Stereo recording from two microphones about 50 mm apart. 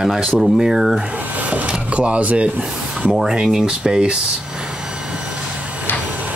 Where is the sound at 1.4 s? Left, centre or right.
Right.